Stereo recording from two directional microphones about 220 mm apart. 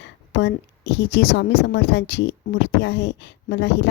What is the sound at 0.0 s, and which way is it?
A woman's voice, 50° left (ahead or behind).